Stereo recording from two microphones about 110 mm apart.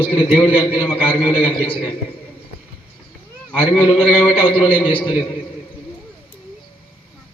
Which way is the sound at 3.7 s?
55° left (ahead or behind).